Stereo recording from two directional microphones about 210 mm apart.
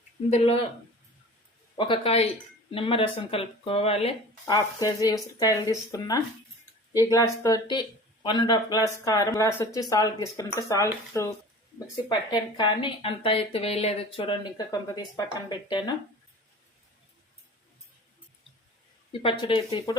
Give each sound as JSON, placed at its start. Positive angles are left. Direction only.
{"t": 0.3, "sound": "speech", "side_deg": 30}
{"t": 1.7, "sound": "a woman's voice", "side_deg": 25}
{"t": 19.2, "sound": "a woman's voice", "side_deg": 25}